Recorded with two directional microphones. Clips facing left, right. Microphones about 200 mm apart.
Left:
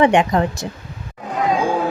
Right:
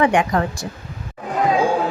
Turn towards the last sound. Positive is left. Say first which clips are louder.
# left 3 dB
turn(degrees=25)  # may be behind; listen again after turning